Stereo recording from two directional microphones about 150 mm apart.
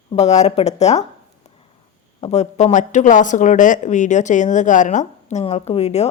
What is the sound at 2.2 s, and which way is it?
Speech, 50° left (ahead or behind).